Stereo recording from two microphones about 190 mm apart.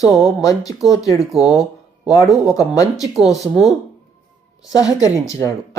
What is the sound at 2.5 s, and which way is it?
Speech, 20° left (ahead or behind).